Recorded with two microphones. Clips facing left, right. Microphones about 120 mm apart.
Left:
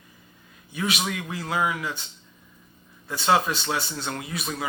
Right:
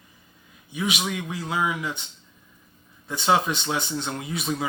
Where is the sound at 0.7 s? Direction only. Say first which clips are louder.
Right 1 dB; 15° right (ahead or behind).